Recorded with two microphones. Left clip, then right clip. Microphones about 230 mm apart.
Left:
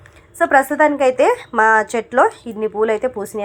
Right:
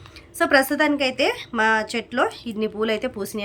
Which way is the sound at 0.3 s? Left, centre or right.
Right.